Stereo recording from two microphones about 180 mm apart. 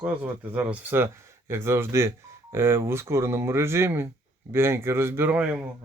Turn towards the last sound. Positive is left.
turn(degrees=-10)  # may be behind; listen again after turning